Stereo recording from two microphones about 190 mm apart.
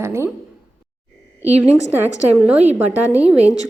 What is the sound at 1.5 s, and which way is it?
A woman's voice, 5° right (ahead or behind).